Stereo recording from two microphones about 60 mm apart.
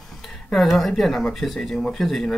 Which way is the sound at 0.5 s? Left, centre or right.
Centre.